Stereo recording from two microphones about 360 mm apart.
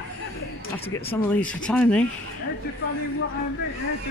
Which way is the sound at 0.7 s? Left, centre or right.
Centre.